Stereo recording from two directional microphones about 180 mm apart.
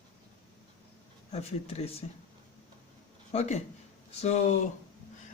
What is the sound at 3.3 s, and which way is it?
Speech, 40° left (ahead or behind).